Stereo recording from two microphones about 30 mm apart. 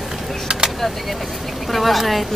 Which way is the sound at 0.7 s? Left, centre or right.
Centre.